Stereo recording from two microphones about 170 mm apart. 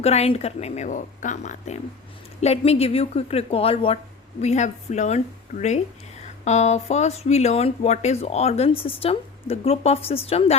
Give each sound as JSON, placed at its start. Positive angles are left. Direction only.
{"t": 0.0, "sound": "a woman's voice", "side_deg": 35}